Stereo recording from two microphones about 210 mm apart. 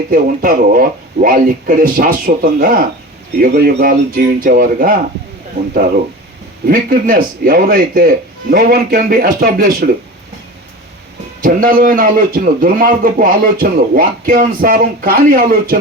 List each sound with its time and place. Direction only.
0.1 s a man's voice: 45° right (ahead or behind)
6.7 s a man's voice: 45° right (ahead or behind)
11.4 s a man's voice: 40° right (ahead or behind)